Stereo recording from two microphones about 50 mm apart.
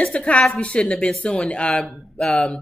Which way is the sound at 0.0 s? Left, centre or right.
Left.